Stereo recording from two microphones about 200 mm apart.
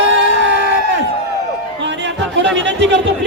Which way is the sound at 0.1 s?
65° right (ahead or behind).